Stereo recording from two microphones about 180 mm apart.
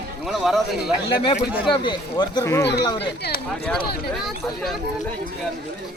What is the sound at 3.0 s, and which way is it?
Speech, 65° left (ahead or behind).